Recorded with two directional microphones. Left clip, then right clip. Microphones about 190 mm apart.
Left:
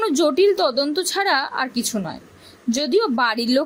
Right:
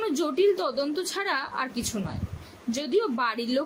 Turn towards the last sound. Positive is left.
turn(degrees=50)  # may be behind; listen again after turning